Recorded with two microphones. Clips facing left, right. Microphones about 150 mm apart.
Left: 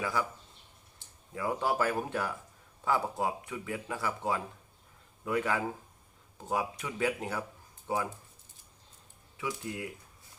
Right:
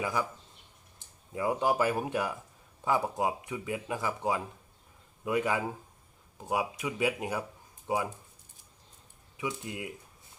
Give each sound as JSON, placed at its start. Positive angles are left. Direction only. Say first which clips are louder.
{"t": 0.0, "sound": "speech", "louder": "right 1 dB", "side_deg": -20}
{"t": 9.4, "sound": "speech", "louder": "right 1 dB", "side_deg": -15}